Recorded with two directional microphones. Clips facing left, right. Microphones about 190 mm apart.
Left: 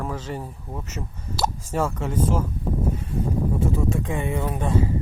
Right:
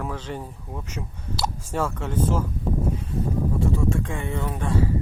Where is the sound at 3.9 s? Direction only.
20° left (ahead or behind).